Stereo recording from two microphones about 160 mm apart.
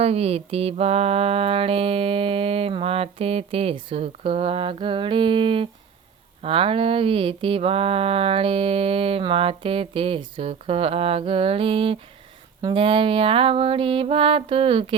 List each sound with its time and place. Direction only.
0.0 s mantra: 40° right (ahead or behind)